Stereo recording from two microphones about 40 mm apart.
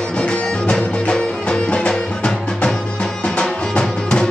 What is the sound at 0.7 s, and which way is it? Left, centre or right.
Music, left.